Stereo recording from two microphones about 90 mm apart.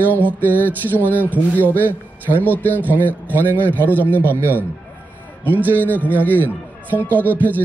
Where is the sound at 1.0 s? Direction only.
20° right (ahead or behind).